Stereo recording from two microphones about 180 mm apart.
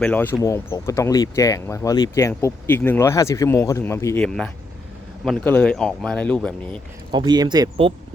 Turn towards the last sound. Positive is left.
turn(degrees=-20)  # may be behind; listen again after turning